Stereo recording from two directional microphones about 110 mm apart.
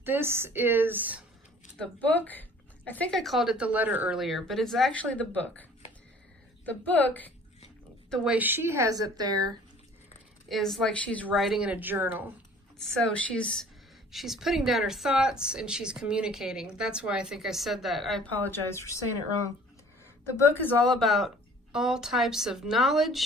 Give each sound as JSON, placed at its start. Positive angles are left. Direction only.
{"t": 0.0, "sound": "a woman's voice", "side_deg": -20}
{"t": 1.8, "sound": "a woman's voice", "side_deg": 15}
{"t": 3.1, "sound": "speech", "side_deg": 0}
{"t": 4.2, "sound": "speech", "side_deg": 0}
{"t": 4.9, "sound": "a woman's voice", "side_deg": 10}
{"t": 6.7, "sound": "a woman's voice", "side_deg": 15}
{"t": 8.1, "sound": "speech", "side_deg": -5}
{"t": 8.4, "sound": "speech", "side_deg": -20}
{"t": 10.5, "sound": "a woman's voice", "side_deg": 0}
{"t": 11.3, "sound": "speech", "side_deg": 0}
{"t": 12.8, "sound": "a woman's voice", "side_deg": 5}
{"t": 18.3, "sound": "speech", "side_deg": 20}
{"t": 20.9, "sound": "speech", "side_deg": 0}